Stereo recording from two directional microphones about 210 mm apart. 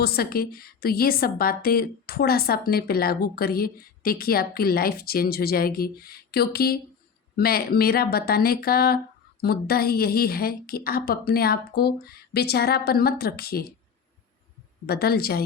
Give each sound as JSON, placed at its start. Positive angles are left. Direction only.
{"t": 0.0, "sound": "a woman's voice", "side_deg": 45}
{"t": 14.8, "sound": "a woman's voice", "side_deg": 50}